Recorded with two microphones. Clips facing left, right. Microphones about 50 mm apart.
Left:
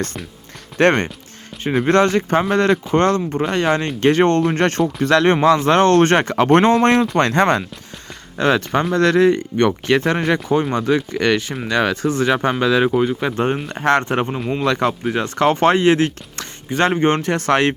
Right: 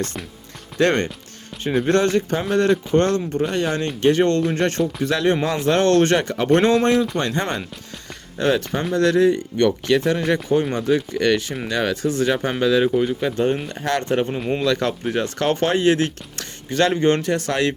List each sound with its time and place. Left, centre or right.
0.8 s speech: left
7.2 s speech: left
8.4 s speech: left
9.6 s speech: left
14.3 s speech: centre
14.6 s speech: left